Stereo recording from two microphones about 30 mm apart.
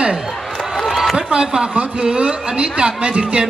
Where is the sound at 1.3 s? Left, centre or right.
Right.